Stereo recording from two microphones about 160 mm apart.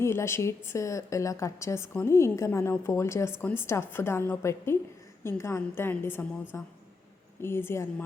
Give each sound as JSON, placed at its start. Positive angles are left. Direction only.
{"t": 0.0, "sound": "a woman's voice", "side_deg": 15}